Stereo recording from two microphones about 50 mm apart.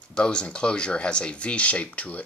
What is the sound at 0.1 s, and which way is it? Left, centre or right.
Speech, centre.